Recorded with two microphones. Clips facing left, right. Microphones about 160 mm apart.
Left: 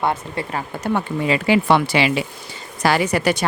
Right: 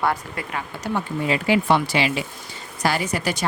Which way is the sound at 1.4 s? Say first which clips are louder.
Left 3 dB; 85° left.